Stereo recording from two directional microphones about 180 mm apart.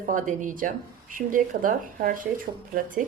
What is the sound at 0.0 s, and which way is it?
Speech, 45° right (ahead or behind).